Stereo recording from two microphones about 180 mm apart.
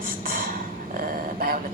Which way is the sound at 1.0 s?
55° right (ahead or behind).